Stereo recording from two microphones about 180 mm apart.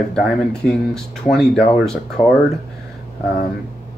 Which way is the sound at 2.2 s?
20° left (ahead or behind).